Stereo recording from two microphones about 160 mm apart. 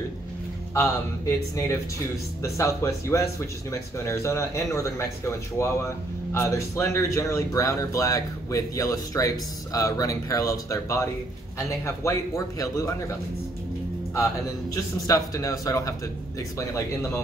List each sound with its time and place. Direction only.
0.7 s speech: 20° left (ahead or behind)
14.7 s speech: 20° left (ahead or behind)